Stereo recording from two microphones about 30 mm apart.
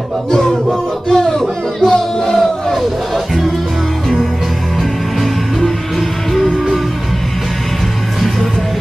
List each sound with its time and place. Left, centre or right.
0.3 s music: centre
5.2 s music: centre